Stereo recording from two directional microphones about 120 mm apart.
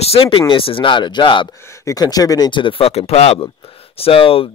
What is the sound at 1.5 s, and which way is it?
Speech, 25° left (ahead or behind).